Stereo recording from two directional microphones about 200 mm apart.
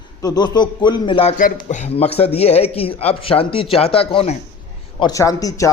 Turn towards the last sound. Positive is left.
turn(degrees=15)  # may be behind; listen again after turning